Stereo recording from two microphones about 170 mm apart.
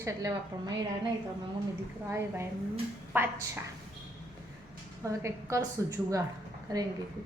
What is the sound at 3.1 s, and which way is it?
Speech, 10° right (ahead or behind).